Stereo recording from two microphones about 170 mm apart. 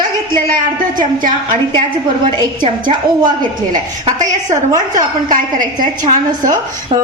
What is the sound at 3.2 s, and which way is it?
Speech, 25° right (ahead or behind).